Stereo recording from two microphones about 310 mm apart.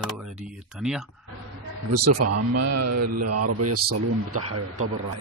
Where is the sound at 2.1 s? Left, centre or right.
Right.